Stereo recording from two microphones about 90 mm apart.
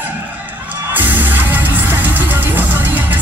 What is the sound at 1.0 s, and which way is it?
Music, 20° right (ahead or behind).